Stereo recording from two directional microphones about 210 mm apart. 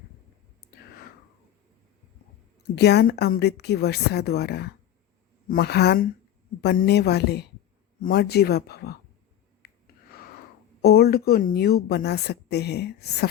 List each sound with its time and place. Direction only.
2.7 s a woman's voice: 50° left (ahead or behind)
9.6 s gasp: 50° left (ahead or behind)
10.8 s a woman's voice: 50° left (ahead or behind)